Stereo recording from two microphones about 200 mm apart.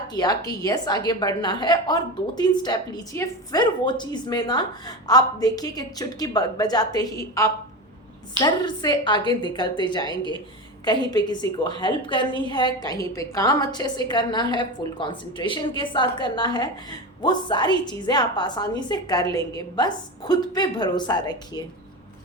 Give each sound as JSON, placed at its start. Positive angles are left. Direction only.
{"t": 0.1, "sound": "a woman's voice", "side_deg": 20}